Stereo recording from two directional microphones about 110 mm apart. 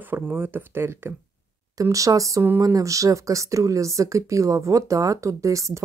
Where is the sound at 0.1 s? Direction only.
20° right (ahead or behind).